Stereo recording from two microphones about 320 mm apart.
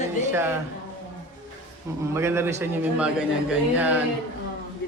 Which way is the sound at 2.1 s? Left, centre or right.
Centre.